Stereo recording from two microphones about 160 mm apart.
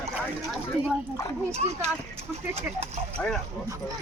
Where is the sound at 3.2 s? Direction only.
5° left (ahead or behind).